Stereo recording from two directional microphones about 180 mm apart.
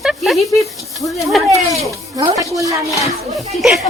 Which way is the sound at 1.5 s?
20° right (ahead or behind).